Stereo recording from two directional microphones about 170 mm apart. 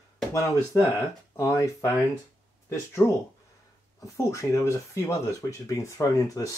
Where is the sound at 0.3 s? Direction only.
20° left (ahead or behind).